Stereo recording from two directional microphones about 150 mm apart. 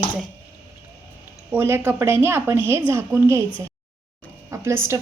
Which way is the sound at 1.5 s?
15° right (ahead or behind).